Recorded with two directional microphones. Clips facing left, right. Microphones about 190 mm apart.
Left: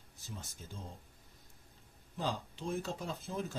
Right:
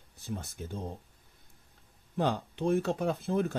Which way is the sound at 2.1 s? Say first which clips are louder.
Right 8 dB; 60° right (ahead or behind).